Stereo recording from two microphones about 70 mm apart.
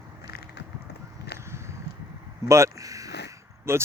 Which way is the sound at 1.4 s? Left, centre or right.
Right.